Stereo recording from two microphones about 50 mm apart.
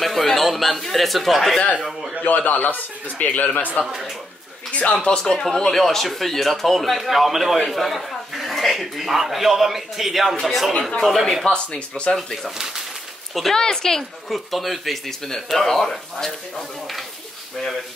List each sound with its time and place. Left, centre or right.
0.0 s a man's voice: centre
2.2 s a man's voice: left
3.8 s speech: centre
5.0 s speech: centre
11.4 s speech: centre
12.2 s speech: centre
12.5 s speech: centre
13.3 s speech: centre